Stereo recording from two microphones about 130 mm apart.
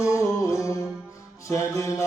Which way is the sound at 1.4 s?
25° left (ahead or behind).